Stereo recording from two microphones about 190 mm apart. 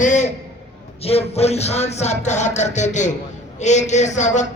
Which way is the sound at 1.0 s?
35° left (ahead or behind).